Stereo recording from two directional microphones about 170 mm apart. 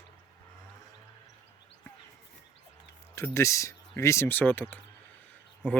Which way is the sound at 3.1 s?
15° left (ahead or behind).